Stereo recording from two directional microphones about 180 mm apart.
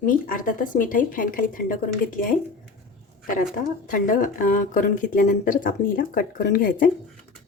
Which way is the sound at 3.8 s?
45° left (ahead or behind).